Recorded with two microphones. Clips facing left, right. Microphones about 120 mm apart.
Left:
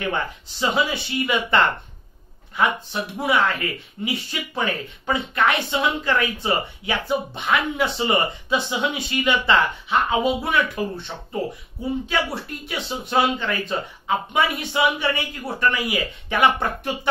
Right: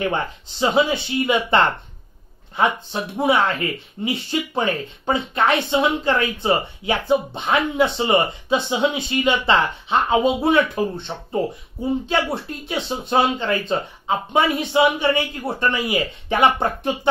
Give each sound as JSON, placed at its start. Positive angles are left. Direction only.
{"t": 0.1, "sound": "speech", "side_deg": -25}
{"t": 12.1, "sound": "speech", "side_deg": -25}